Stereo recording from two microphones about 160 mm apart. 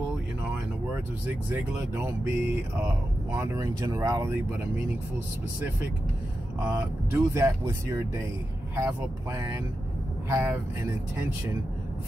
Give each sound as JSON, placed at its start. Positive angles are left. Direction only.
{"t": 1.5, "sound": "speech", "side_deg": -15}
{"t": 6.6, "sound": "speech", "side_deg": -15}